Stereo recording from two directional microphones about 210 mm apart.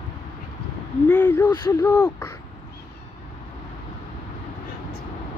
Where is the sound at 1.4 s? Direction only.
10° left (ahead or behind).